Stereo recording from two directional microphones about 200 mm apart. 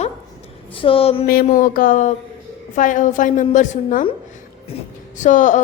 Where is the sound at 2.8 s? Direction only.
40° left (ahead or behind).